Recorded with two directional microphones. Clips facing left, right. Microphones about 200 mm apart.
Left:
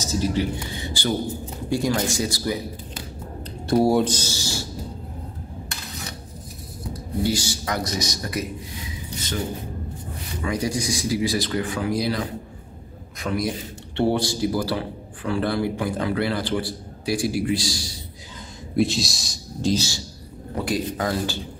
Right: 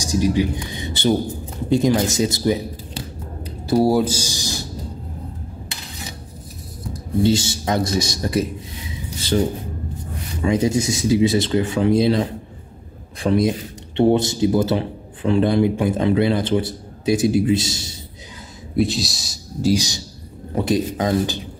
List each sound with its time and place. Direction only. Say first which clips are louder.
0.0 s speech: right 5 dB; 15° right (ahead or behind)
3.4 s speech: right 2 dB; 5° right (ahead or behind)
7.2 s speech: right 6 dB; 25° right (ahead or behind)
10.4 s speech: right 7 dB; 25° right (ahead or behind)
18.8 s speech: right 2 dB; centre (ahead or behind); by 21.4 s 20° right (ahead or behind)